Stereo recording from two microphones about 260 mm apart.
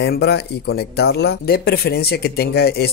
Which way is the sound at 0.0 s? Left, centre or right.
Left.